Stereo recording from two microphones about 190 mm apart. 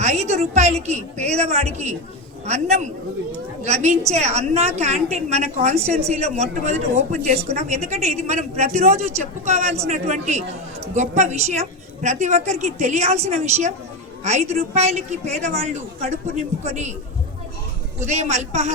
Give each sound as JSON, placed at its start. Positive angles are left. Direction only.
{"t": 0.0, "sound": "a woman's voice", "side_deg": -35}
{"t": 18.0, "sound": "a woman's voice", "side_deg": -35}